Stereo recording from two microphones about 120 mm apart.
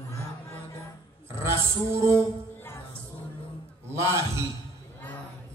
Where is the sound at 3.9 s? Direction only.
20° right (ahead or behind).